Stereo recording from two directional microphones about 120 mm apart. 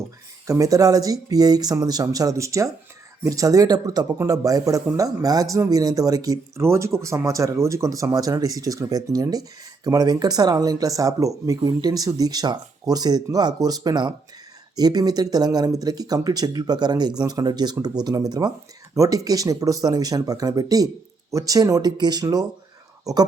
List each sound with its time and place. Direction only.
0.4 s speech: 25° right (ahead or behind)